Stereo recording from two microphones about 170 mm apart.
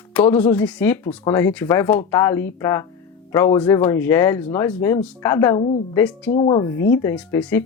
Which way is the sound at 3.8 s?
15° left (ahead or behind).